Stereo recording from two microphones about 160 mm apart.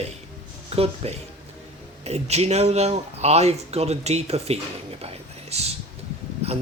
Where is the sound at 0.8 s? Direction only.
40° right (ahead or behind).